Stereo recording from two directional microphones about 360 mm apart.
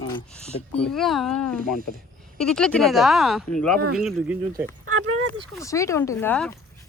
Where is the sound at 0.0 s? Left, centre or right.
Centre.